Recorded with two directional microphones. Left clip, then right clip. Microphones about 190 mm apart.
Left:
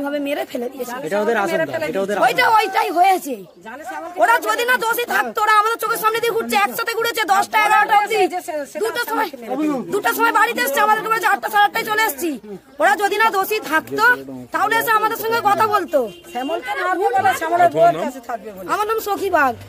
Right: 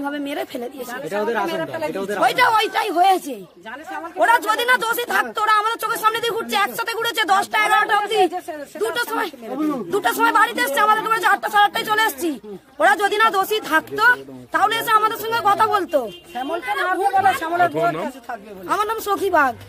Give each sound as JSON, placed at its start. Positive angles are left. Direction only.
{"t": 0.0, "sound": "speech", "side_deg": 10}
{"t": 1.1, "sound": "speech", "side_deg": 35}
{"t": 1.5, "sound": "speech", "side_deg": 0}
{"t": 9.5, "sound": "speech", "side_deg": 20}
{"t": 9.9, "sound": "speech", "side_deg": 5}
{"t": 17.2, "sound": "speech", "side_deg": 25}
{"t": 17.7, "sound": "speech", "side_deg": 5}